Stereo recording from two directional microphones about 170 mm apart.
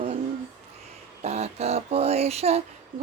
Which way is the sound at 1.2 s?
40° right (ahead or behind).